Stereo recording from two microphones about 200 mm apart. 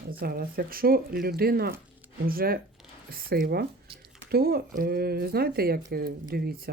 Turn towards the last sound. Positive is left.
turn(degrees=-50)  # may be behind; listen again after turning